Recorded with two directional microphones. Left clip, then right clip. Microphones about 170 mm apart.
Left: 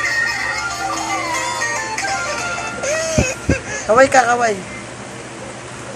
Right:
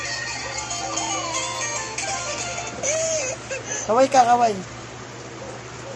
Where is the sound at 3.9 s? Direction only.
10° right (ahead or behind).